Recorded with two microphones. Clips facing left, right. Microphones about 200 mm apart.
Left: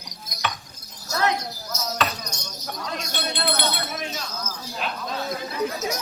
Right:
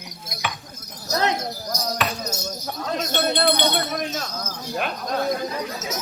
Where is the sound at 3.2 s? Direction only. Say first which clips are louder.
Right 6 dB; 45° right (ahead or behind).